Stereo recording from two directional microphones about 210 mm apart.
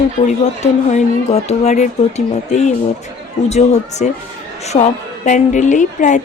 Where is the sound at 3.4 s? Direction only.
30° left (ahead or behind).